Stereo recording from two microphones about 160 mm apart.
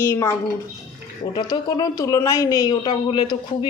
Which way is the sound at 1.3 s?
25° left (ahead or behind).